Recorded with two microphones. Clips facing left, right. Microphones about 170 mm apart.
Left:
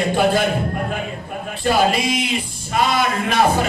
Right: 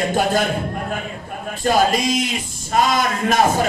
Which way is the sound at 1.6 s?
45° right (ahead or behind).